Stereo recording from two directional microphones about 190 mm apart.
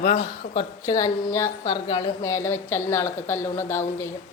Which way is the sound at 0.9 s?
15° left (ahead or behind).